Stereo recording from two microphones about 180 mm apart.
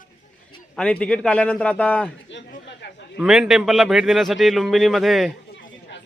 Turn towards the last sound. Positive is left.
turn(degrees=0)  # may be behind; listen again after turning